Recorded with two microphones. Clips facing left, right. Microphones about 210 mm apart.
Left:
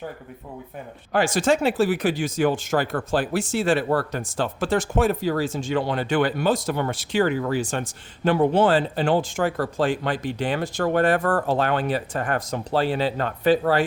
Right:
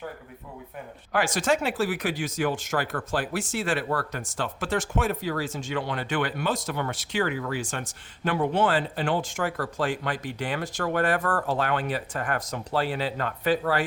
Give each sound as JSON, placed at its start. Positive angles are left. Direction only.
{"t": 1.1, "sound": "speech", "side_deg": 30}